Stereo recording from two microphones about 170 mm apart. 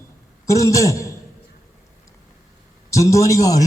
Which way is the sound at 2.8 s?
20° left (ahead or behind).